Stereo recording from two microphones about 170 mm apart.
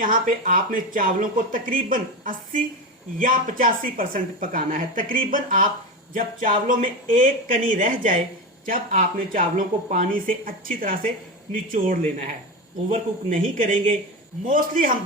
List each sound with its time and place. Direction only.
0.0 s speech: 55° right (ahead or behind)